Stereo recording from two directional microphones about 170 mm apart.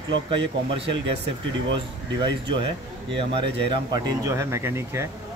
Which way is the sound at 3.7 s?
25° right (ahead or behind).